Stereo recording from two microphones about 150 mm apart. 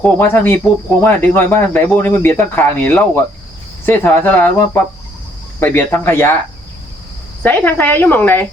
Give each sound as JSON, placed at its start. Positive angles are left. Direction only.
{"t": 0.0, "sound": "speech", "side_deg": 15}
{"t": 7.4, "sound": "speech", "side_deg": 10}